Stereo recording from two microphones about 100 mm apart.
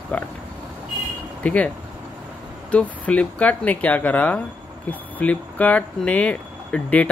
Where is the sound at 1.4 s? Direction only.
15° left (ahead or behind).